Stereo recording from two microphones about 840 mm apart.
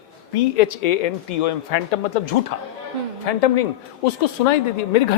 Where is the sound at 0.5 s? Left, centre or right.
Left.